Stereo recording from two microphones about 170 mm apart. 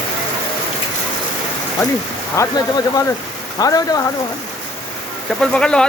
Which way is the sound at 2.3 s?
15° left (ahead or behind).